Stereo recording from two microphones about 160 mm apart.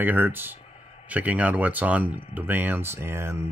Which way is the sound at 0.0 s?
10° right (ahead or behind).